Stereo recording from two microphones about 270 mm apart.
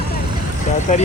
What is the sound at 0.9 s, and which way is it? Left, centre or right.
Speech, left.